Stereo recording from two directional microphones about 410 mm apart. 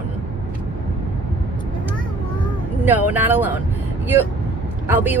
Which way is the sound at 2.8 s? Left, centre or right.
Centre.